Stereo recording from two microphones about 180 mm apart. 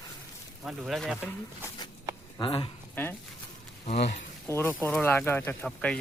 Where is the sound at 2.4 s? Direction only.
30° left (ahead or behind).